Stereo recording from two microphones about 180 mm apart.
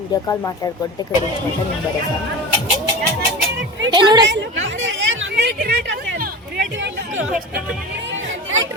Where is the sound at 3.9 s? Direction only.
25° right (ahead or behind).